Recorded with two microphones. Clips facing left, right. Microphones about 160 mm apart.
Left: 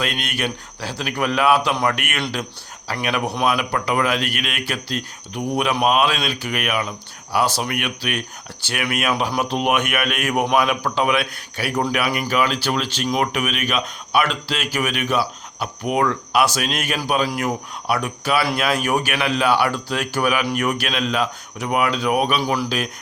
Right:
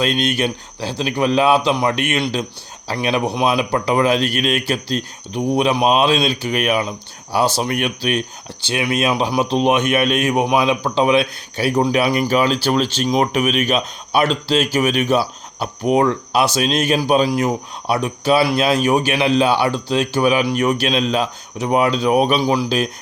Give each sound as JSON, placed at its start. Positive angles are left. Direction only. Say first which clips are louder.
{"t": 0.0, "sound": "speech", "louder": "right 6 dB", "side_deg": -30}
{"t": 8.6, "sound": "speech", "louder": "right 4 dB", "side_deg": -20}
{"t": 22.4, "sound": "speech", "louder": "right 4 dB", "side_deg": -15}